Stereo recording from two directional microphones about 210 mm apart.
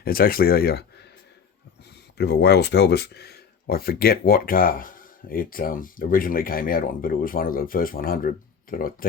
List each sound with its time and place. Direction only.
0.0 s speech: 45° left (ahead or behind)
2.1 s speech: 50° left (ahead or behind)